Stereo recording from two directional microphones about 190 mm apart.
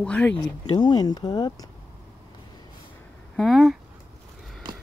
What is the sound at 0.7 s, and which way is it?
Speech, 20° left (ahead or behind).